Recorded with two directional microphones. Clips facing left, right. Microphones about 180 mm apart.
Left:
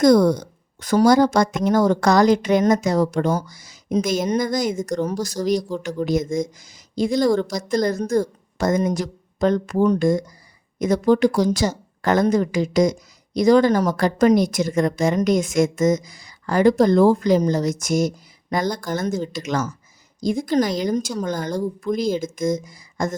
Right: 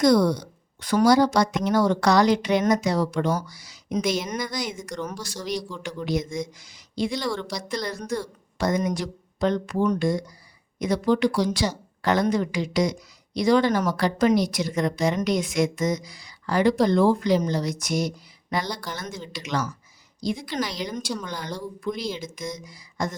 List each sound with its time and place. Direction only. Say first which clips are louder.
0.0 s speech: left 4 dB; 45° left (ahead or behind)